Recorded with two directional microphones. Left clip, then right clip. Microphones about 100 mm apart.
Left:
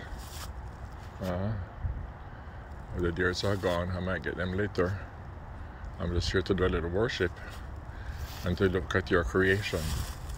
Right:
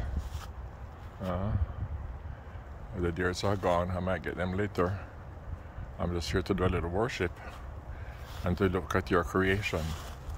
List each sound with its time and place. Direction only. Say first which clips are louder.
1.3 s speech: even; 30° right (ahead or behind)
3.0 s speech: left 2 dB; 35° right (ahead or behind)